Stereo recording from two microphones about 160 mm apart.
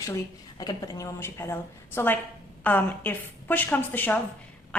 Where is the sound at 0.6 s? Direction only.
25° left (ahead or behind).